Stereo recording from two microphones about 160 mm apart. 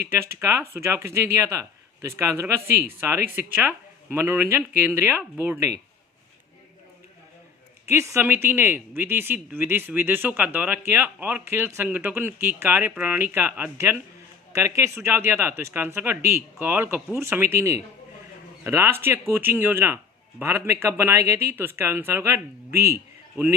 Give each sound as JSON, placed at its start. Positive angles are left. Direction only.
{"t": 0.1, "sound": "speech", "side_deg": -15}
{"t": 7.9, "sound": "speech", "side_deg": -15}